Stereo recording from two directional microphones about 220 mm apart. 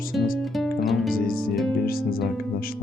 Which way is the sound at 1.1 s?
40° left (ahead or behind).